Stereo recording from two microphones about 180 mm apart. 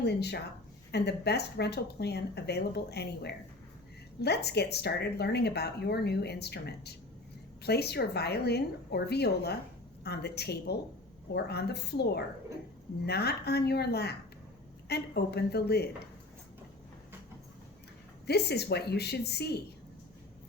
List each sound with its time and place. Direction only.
0.0 s speech: 65° left (ahead or behind)
18.3 s speech: 65° left (ahead or behind)